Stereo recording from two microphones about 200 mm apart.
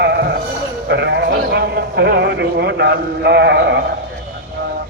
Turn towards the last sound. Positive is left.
turn(degrees=-60)  # may be behind; listen again after turning